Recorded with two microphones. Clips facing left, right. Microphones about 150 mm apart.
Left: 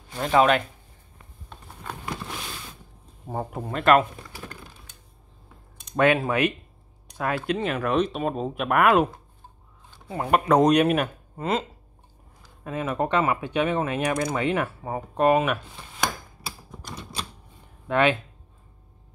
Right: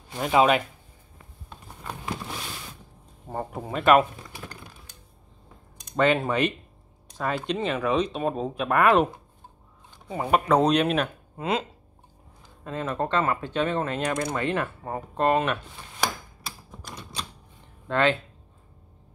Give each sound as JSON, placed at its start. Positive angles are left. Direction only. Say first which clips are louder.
{"t": 0.3, "sound": "speech", "louder": "left 1 dB", "side_deg": -10}
{"t": 3.3, "sound": "speech", "louder": "left 1 dB", "side_deg": 5}
{"t": 6.1, "sound": "speech", "louder": "left 1 dB", "side_deg": 5}
{"t": 12.6, "sound": "speech", "louder": "left 2 dB", "side_deg": 10}
{"t": 16.4, "sound": "typewriter", "louder": "left 2 dB", "side_deg": 5}
{"t": 17.8, "sound": "speech", "louder": "left 2 dB", "side_deg": 15}